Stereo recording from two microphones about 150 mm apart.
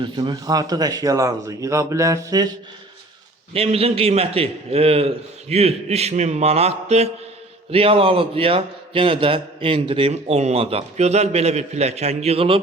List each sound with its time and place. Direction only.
0.0 s speech: 30° right (ahead or behind)
3.5 s a man's voice: 40° right (ahead or behind)